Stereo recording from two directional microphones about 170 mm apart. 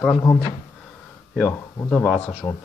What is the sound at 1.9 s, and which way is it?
Speech, 5° left (ahead or behind).